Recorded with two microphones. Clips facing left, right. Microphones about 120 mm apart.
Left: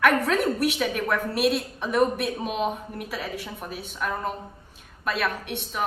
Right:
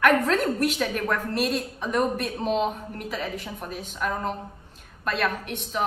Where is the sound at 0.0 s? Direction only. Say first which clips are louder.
Right 1 dB; 5° left (ahead or behind).